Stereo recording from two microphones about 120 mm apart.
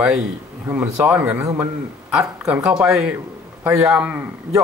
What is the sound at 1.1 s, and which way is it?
Speech, 15° right (ahead or behind).